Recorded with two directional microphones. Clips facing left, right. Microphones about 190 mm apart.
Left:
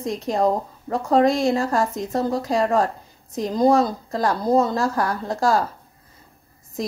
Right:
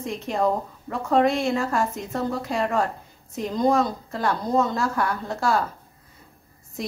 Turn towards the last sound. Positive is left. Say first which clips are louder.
# left 3 dB
turn(degrees=35)  # may be behind; listen again after turning